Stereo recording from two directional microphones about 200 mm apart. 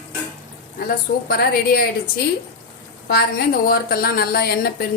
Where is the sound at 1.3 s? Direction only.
50° left (ahead or behind).